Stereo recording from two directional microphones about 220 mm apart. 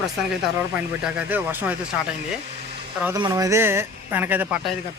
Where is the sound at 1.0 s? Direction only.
5° right (ahead or behind).